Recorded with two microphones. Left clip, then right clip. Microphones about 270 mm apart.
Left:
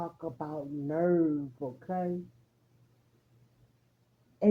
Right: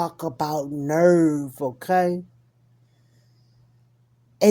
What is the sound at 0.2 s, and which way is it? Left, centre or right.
Speech, right.